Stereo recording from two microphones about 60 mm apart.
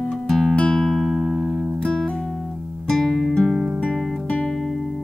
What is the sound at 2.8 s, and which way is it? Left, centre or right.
Music, centre.